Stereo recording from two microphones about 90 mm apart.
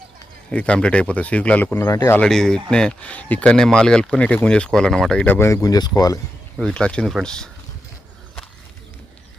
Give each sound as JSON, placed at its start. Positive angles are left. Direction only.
{"t": 0.5, "sound": "speech", "side_deg": 15}
{"t": 1.8, "sound": "speech", "side_deg": 40}
{"t": 2.2, "sound": "speech", "side_deg": 5}
{"t": 5.6, "sound": "speech", "side_deg": 45}
{"t": 6.6, "sound": "speech", "side_deg": 10}